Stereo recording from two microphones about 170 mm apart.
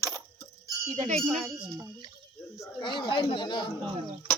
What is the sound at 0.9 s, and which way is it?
Speech, 45° right (ahead or behind).